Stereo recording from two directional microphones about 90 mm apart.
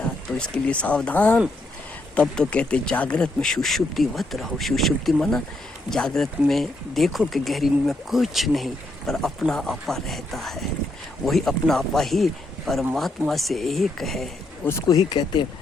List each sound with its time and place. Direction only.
0.5 s speech: 15° left (ahead or behind)
14.6 s speech: 30° left (ahead or behind)
14.8 s speech: 45° left (ahead or behind)